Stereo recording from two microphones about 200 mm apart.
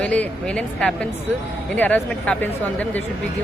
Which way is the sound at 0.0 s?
5° left (ahead or behind).